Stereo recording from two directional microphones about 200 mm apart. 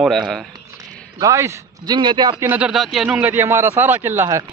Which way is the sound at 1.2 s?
15° right (ahead or behind).